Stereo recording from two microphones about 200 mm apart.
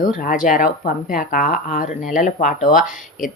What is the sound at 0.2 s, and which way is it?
A woman's voice, 40° left (ahead or behind).